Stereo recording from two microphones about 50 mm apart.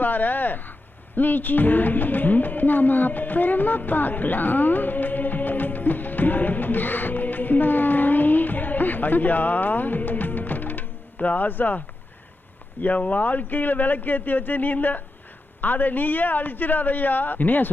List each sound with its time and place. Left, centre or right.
0.0 s speech: left
12.8 s a man's voice: left